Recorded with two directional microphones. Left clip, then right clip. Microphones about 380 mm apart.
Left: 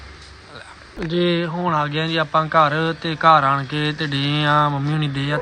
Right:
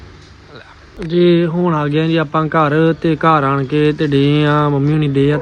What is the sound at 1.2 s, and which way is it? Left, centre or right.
Speech, left.